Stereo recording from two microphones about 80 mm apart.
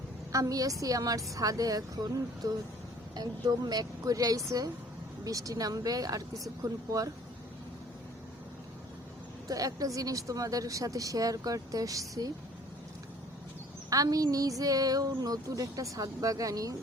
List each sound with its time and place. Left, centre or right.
0.3 s speech: right
9.5 s speech: right
13.9 s speech: right